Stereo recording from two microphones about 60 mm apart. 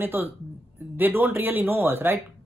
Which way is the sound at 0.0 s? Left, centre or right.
Right.